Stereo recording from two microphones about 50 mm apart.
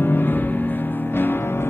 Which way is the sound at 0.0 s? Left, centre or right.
Left.